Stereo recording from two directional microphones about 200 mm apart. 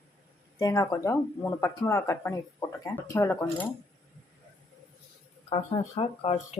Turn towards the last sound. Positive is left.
turn(degrees=30)  # may be behind; listen again after turning